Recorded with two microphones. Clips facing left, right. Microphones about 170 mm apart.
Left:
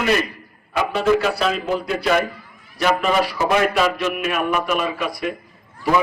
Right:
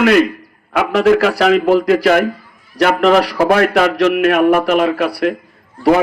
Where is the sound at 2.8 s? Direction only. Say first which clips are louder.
Right 7 dB; 70° right (ahead or behind).